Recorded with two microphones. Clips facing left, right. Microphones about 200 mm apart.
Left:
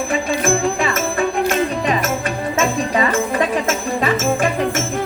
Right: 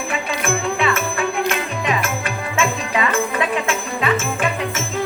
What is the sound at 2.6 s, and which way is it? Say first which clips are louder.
Jingle bell: left 2 dB; 40° left (ahead or behind).